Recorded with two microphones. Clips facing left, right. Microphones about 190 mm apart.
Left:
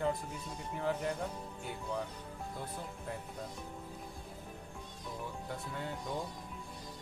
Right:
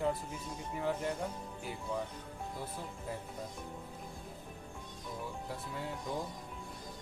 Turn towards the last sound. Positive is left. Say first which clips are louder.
# even
turn(degrees=0)  # may be behind; listen again after turning